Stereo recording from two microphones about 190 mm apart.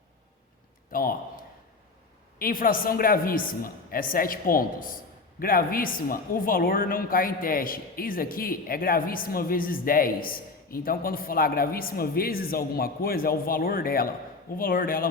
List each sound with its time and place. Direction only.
0.9 s a man's voice: 50° left (ahead or behind)